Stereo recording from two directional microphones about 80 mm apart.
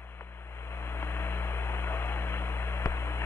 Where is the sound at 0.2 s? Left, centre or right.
Left.